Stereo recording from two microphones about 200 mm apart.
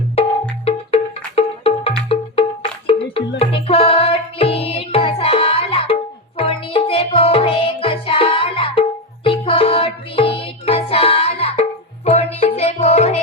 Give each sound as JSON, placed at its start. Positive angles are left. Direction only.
{"t": 0.6, "sound": "music", "side_deg": 30}